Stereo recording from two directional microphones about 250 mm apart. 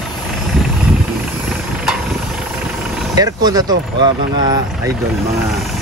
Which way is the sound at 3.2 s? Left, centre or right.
Centre.